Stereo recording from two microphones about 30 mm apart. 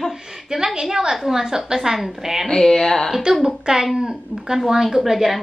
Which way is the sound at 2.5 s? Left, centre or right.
Centre.